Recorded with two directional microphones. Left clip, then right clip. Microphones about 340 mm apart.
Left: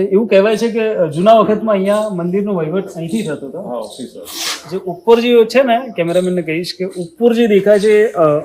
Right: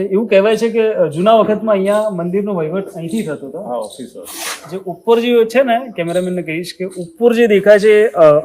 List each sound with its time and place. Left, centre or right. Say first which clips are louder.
0.0 s a man's voice: left 1 dB; centre
4.4 s a man's voice: left 3 dB; centre
7.6 s speech: right 3 dB; right